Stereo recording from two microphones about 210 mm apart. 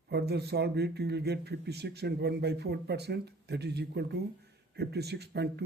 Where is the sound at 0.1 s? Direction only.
50° right (ahead or behind).